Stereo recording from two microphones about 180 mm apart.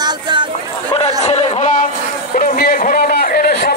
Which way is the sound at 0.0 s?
25° right (ahead or behind).